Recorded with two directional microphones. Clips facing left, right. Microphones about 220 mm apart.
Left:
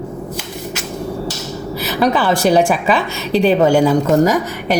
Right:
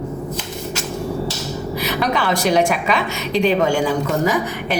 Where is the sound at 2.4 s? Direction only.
30° left (ahead or behind).